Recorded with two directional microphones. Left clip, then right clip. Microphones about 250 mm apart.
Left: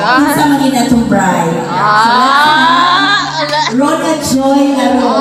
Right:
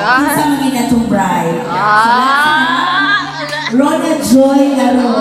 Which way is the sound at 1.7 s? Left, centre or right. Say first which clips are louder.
Left 1 dB; centre.